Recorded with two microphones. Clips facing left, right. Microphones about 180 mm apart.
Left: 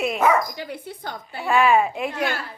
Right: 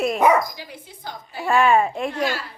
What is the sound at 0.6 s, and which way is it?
Speech, 60° left (ahead or behind).